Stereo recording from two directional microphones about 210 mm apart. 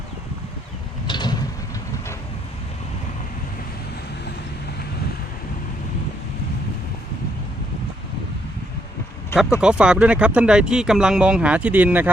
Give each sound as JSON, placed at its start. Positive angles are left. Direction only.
{"t": 1.0, "sound": "mechanisms", "side_deg": 20}
{"t": 9.6, "sound": "speech", "side_deg": -5}